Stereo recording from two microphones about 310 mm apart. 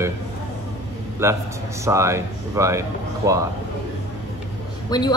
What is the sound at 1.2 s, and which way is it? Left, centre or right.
Speech, centre.